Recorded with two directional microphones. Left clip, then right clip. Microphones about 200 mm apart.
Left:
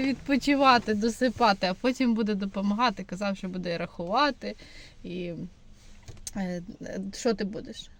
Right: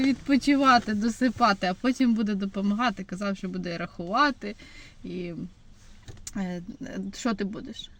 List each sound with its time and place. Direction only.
0.0 s speech: 10° left (ahead or behind)